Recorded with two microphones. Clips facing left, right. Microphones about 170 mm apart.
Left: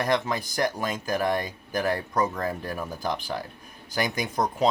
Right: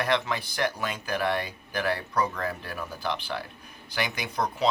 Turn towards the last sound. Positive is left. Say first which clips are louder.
# left 3 dB
turn(degrees=45)  # may be behind; listen again after turning